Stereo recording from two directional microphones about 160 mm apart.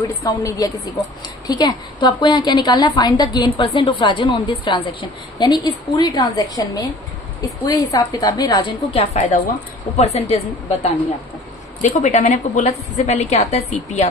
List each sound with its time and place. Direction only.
0.0 s a woman's voice: 20° left (ahead or behind)
9.0 s a woman's voice: 40° left (ahead or behind)